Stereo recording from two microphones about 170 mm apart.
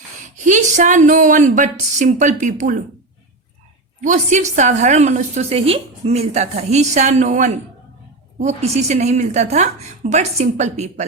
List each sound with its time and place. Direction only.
0.4 s a woman's voice: 45° right (ahead or behind)
4.0 s a woman's voice: 45° right (ahead or behind)